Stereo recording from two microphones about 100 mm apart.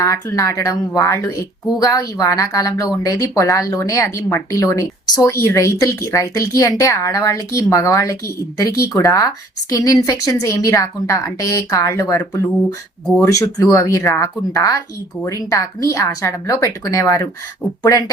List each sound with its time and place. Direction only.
0.0 s a woman's voice: 30° left (ahead or behind)